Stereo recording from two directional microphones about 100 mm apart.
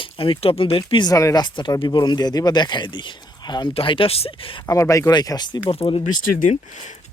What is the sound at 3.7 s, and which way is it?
Speech, 65° left (ahead or behind).